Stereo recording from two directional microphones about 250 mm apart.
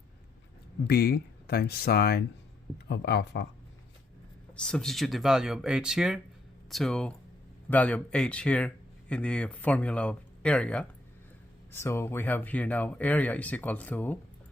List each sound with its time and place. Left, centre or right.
0.9 s speech: left
4.5 s speech: centre